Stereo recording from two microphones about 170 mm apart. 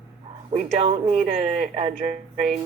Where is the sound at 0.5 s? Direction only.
30° right (ahead or behind).